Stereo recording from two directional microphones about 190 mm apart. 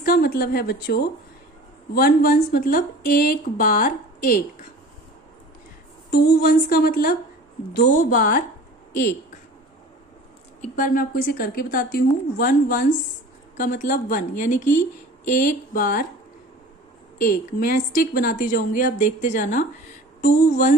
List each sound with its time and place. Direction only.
0.0 s a woman's voice: 50° left (ahead or behind)
6.1 s speech: 50° left (ahead or behind)
10.6 s speech: 45° left (ahead or behind)
17.2 s speech: 50° left (ahead or behind)